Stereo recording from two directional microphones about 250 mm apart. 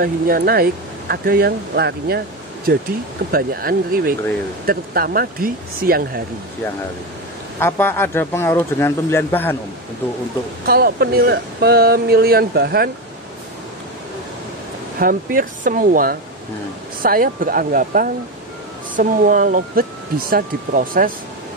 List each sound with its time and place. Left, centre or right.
0.0 s speech: right
7.5 s speech: centre
10.6 s speech: right
15.0 s speech: right